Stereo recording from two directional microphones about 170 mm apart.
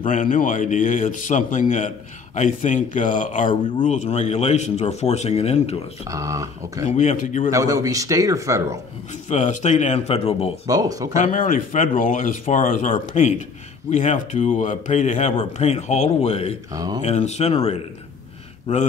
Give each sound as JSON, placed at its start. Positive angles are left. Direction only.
{"t": 0.0, "sound": "a man's voice", "side_deg": 50}
{"t": 6.0, "sound": "speech", "side_deg": -20}
{"t": 7.0, "sound": "a man's voice", "side_deg": 45}
{"t": 7.5, "sound": "speech", "side_deg": -20}
{"t": 9.3, "sound": "speech", "side_deg": 45}
{"t": 10.7, "sound": "speech", "side_deg": -20}
{"t": 11.3, "sound": "a man's voice", "side_deg": 50}
{"t": 16.7, "sound": "speech", "side_deg": -20}
{"t": 17.0, "sound": "speech", "side_deg": 40}
{"t": 18.7, "sound": "speech", "side_deg": 40}